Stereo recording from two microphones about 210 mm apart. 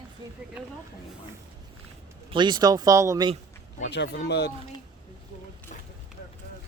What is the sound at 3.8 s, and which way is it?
Speech, 55° left (ahead or behind).